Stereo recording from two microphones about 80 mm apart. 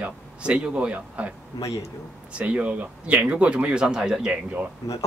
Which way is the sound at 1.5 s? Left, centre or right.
Left.